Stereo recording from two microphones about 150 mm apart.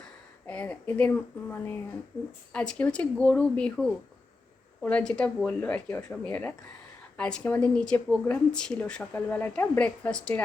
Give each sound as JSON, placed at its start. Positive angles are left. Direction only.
{"t": 0.4, "sound": "speech", "side_deg": 10}